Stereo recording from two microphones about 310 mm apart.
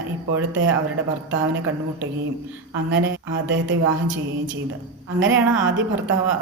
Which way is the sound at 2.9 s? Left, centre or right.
Right.